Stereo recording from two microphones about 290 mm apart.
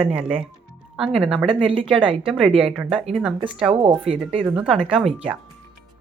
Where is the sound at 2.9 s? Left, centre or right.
Right.